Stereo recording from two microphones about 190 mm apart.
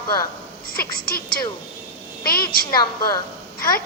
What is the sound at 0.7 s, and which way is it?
A woman's voice, 50° left (ahead or behind).